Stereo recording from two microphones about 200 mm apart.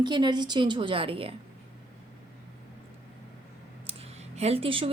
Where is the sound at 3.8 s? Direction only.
30° right (ahead or behind).